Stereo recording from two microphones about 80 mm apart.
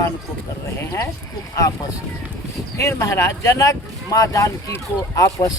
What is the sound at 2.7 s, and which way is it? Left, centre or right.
Speech, left.